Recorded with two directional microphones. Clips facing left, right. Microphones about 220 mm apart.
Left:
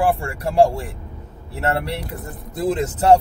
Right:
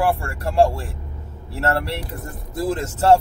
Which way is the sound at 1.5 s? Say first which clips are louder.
Even; 20° left (ahead or behind).